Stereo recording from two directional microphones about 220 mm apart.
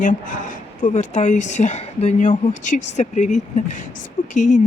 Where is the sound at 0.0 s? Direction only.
35° left (ahead or behind).